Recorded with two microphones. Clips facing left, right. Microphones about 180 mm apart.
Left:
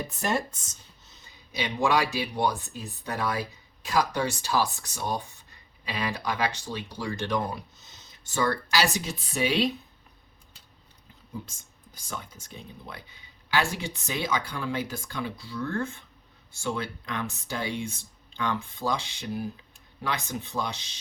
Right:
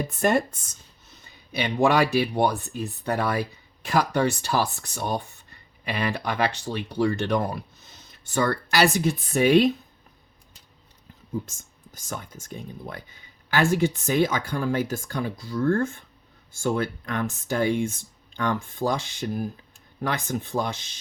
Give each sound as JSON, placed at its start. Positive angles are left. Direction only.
{"t": 0.2, "sound": "speech", "side_deg": -55}
{"t": 1.5, "sound": "speech", "side_deg": -60}
{"t": 11.4, "sound": "speech", "side_deg": -45}